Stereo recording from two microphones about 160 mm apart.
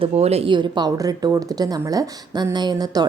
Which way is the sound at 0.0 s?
40° right (ahead or behind).